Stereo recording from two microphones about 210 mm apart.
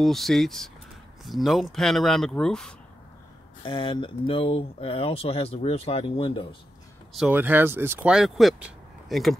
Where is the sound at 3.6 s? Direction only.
20° left (ahead or behind).